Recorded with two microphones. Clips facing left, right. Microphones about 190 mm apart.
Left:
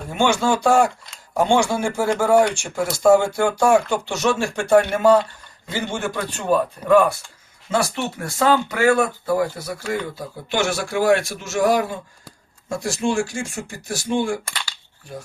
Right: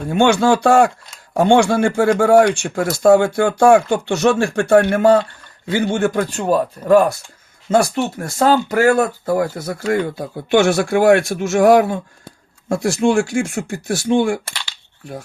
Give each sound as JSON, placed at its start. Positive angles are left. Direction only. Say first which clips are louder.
{"t": 0.1, "sound": "speech", "louder": "right 5 dB", "side_deg": -60}